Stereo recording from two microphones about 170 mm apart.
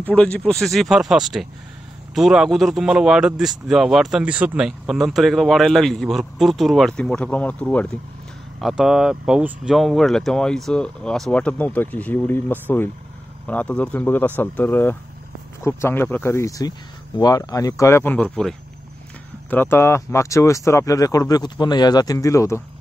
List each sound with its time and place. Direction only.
0.0 s speech: 5° left (ahead or behind)